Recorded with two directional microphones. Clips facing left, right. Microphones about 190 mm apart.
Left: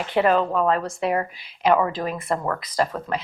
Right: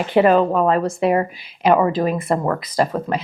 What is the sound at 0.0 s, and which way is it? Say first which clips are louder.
Speech: right 5 dB; 10° right (ahead or behind).